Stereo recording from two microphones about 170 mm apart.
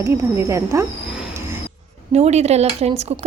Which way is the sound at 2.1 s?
40° right (ahead or behind).